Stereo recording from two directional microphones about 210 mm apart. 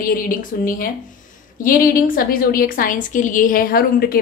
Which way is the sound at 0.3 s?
40° left (ahead or behind).